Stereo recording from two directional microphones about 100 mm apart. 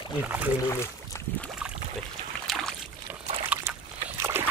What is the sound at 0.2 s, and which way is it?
Speech, 15° right (ahead or behind).